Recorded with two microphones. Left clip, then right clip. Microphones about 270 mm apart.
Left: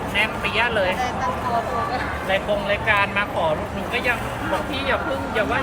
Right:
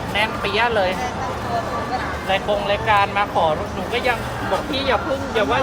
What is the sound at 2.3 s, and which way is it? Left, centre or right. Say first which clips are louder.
Speech: right 2 dB; right.